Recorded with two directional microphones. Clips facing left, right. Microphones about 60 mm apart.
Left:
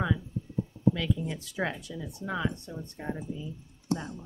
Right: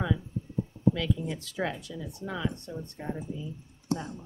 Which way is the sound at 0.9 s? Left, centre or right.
Centre.